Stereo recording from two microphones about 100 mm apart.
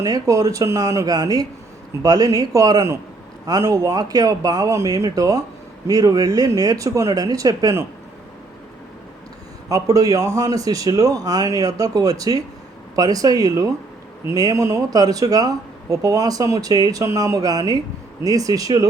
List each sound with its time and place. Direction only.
0.0 s speech: 35° right (ahead or behind)
9.6 s speech: 35° right (ahead or behind)